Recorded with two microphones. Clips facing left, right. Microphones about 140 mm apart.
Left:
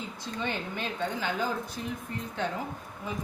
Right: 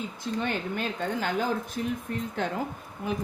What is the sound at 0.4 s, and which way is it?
A woman's voice, 45° right (ahead or behind).